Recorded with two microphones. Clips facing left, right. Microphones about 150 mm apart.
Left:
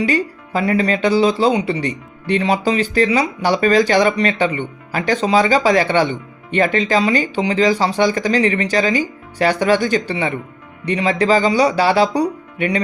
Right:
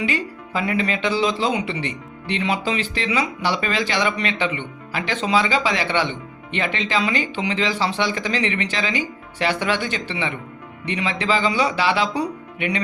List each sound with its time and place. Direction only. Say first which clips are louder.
0.0 s speech: left 6 dB; 40° left (ahead or behind)